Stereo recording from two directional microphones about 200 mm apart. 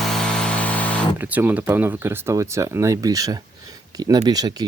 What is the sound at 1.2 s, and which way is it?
Speech, 10° right (ahead or behind).